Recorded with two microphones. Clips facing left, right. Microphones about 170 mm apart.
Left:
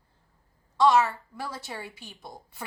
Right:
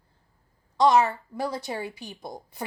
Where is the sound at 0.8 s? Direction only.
20° right (ahead or behind).